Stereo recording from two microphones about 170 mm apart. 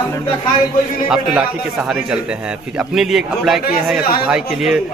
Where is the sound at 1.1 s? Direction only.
Centre (ahead or behind).